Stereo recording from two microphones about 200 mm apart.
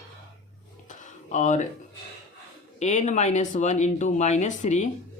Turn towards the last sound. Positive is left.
turn(degrees=40)  # may be behind; listen again after turning